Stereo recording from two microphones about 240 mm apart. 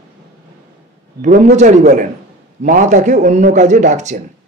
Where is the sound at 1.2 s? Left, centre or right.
Right.